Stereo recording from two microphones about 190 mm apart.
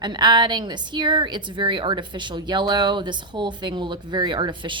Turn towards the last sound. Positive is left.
turn(degrees=-25)  # may be behind; listen again after turning